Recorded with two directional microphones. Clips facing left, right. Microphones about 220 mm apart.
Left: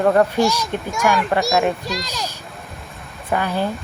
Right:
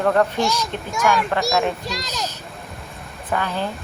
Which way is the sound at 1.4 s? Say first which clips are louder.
Left 2 dB; centre (ahead or behind).